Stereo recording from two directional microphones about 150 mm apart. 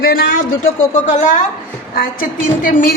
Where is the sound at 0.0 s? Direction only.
80° left; by 1.4 s 55° left (ahead or behind).